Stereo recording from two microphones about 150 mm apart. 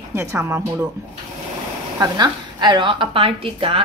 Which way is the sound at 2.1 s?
30° right (ahead or behind).